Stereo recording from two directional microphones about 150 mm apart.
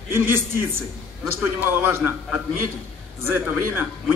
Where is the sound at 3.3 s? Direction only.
15° right (ahead or behind).